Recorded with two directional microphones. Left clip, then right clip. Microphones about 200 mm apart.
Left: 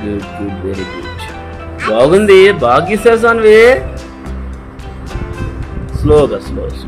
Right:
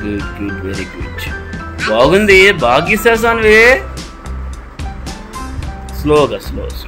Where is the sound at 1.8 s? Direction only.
20° left (ahead or behind).